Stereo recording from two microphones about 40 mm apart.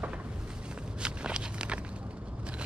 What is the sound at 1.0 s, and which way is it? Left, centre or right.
Walk, right.